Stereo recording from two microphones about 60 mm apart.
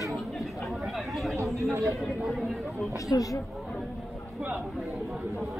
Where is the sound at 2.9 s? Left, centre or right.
Left.